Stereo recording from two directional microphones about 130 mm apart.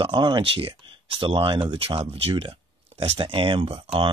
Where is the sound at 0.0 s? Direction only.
35° right (ahead or behind).